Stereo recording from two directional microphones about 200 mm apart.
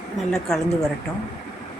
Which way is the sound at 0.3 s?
Centre (ahead or behind).